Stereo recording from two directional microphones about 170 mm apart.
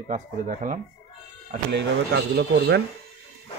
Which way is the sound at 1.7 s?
90° right.